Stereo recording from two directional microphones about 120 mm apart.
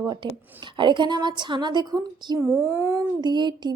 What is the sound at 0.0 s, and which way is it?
Speech, 40° right (ahead or behind).